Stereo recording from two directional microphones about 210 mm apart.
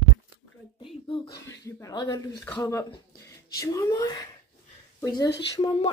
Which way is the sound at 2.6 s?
15° left (ahead or behind).